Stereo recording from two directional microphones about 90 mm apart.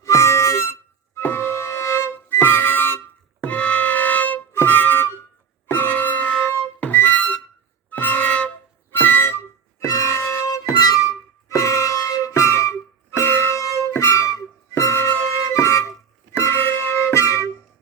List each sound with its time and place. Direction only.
0.0 s harmonica: 30° left (ahead or behind)
3.4 s music: 15° left (ahead or behind)
4.5 s harmonica: 20° left (ahead or behind)
5.6 s music: 20° left (ahead or behind)
9.8 s music: 40° left (ahead or behind)